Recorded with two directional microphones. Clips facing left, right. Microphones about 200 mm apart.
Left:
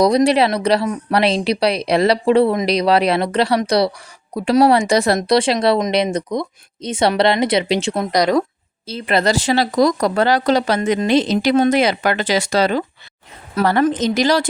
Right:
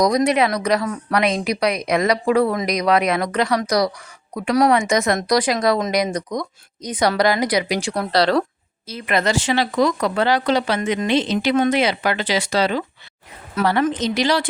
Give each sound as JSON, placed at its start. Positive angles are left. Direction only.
{"t": 0.0, "sound": "speech", "side_deg": 30}
{"t": 8.9, "sound": "speech", "side_deg": 30}